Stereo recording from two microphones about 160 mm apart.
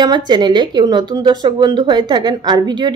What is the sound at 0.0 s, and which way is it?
Speech, 25° right (ahead or behind).